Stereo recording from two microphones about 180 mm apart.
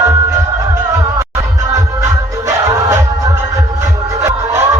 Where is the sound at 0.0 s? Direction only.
20° right (ahead or behind).